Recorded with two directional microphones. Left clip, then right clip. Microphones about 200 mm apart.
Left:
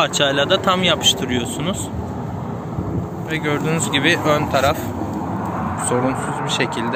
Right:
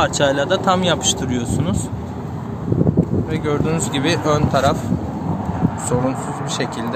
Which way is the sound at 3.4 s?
20° right (ahead or behind).